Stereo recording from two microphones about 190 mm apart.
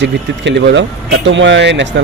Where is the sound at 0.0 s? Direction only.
70° right (ahead or behind).